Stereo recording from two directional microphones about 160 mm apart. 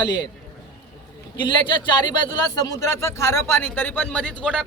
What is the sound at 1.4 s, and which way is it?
Speech, 30° left (ahead or behind).